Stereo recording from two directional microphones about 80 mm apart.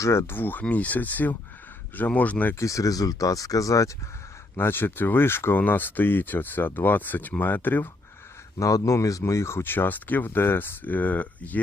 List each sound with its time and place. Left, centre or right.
0.0 s speech: left
2.6 s speech: left
4.5 s speech: left
8.5 s speech: left